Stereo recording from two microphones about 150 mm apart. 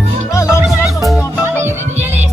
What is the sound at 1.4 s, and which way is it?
Music, 15° right (ahead or behind).